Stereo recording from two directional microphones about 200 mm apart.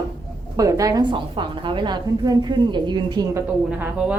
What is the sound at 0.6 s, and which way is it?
Speech, 15° right (ahead or behind).